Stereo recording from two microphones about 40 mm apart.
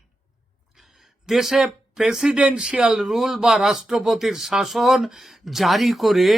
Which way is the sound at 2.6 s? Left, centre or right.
Centre.